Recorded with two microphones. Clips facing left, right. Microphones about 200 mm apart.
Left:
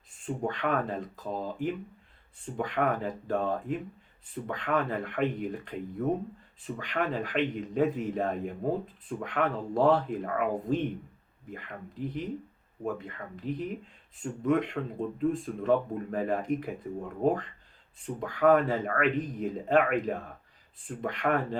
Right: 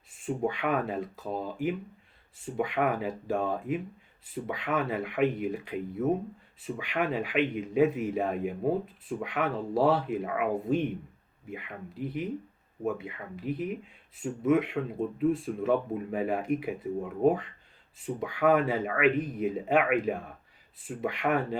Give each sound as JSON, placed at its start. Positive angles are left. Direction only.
{"t": 0.3, "sound": "speech", "side_deg": -10}